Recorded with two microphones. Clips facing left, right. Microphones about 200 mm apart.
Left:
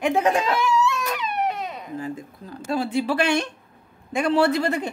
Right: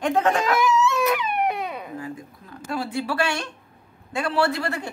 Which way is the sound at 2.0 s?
30° left (ahead or behind).